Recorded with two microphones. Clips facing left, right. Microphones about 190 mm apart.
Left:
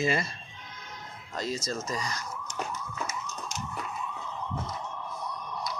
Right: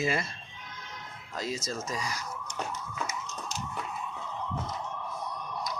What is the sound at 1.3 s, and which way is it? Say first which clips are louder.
Speech: left 2 dB; 5° right (ahead or behind).